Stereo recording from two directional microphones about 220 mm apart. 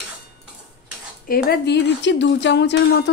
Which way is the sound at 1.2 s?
40° left (ahead or behind).